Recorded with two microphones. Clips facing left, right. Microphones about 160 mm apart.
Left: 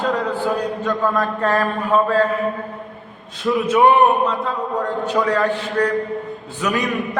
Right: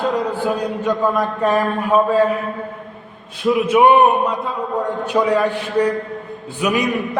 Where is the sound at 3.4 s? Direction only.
10° right (ahead or behind).